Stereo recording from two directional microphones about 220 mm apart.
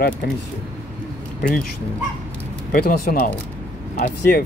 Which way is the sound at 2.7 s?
40° left (ahead or behind).